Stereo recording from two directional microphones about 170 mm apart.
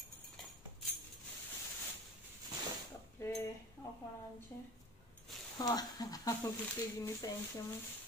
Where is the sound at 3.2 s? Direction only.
15° left (ahead or behind).